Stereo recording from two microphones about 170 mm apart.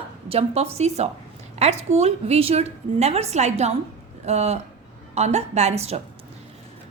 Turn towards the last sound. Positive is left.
turn(degrees=-40)  # may be behind; listen again after turning